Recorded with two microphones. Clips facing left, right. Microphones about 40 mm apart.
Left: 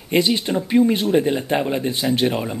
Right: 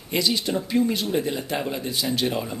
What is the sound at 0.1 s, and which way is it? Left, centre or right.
Speech, left.